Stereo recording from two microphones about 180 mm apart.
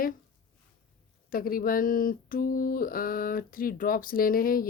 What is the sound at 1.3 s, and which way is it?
Speech, 55° left (ahead or behind).